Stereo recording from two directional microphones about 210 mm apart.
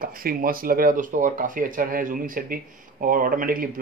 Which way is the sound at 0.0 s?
45° right (ahead or behind).